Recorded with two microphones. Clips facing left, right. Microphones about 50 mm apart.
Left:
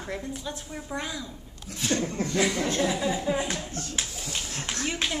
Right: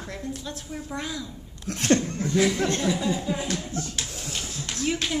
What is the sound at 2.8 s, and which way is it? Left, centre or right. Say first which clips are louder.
Speech: right 1 dB; centre.